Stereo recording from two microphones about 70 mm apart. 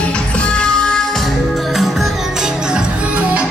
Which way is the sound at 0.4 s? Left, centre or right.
Centre.